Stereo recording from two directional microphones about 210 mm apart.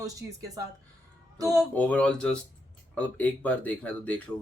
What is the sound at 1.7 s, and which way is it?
Speech, 5° left (ahead or behind).